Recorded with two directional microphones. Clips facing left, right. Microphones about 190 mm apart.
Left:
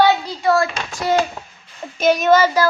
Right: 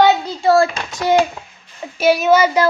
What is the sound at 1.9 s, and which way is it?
Speech, 5° right (ahead or behind).